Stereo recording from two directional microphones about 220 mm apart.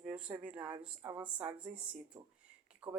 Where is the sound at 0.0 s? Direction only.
5° right (ahead or behind).